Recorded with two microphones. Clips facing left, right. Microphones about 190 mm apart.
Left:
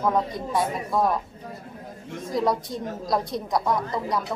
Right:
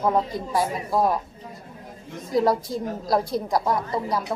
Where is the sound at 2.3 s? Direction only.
Centre (ahead or behind).